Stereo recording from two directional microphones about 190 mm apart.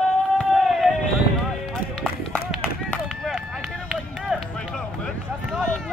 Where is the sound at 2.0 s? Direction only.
5° left (ahead or behind).